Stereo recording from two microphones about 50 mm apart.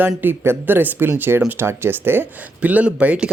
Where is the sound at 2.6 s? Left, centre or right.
Right.